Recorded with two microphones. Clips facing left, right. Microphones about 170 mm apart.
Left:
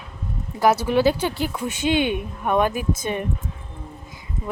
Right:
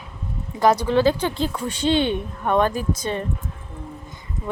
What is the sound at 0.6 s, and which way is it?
Speech, 5° left (ahead or behind).